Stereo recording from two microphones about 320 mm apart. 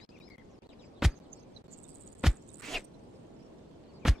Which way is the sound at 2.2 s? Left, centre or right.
Centre.